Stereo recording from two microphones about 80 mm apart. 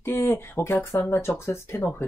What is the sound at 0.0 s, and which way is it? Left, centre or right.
Speech, left.